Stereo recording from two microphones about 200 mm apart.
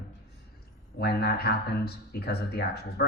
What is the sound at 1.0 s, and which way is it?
A man's voice, 50° left (ahead or behind).